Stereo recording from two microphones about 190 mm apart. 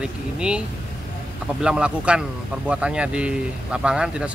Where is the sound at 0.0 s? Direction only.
5° right (ahead or behind).